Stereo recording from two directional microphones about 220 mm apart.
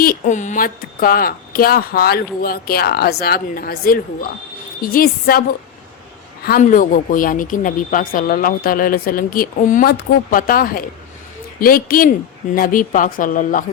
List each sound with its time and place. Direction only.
0.0 s speech: 35° left (ahead or behind)
6.4 s speech: 40° left (ahead or behind)